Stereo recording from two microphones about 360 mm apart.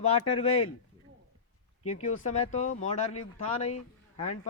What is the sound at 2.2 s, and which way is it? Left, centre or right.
Speech, centre.